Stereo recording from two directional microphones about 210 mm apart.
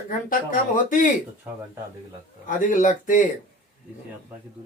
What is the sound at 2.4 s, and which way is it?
Speech, 40° left (ahead or behind).